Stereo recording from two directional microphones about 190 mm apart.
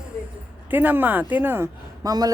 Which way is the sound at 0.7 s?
10° right (ahead or behind).